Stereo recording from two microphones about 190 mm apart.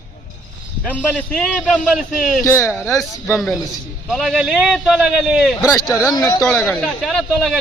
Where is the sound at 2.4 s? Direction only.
15° left (ahead or behind).